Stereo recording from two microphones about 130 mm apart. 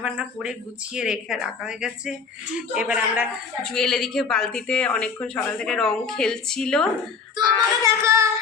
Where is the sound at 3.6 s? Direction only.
5° left (ahead or behind).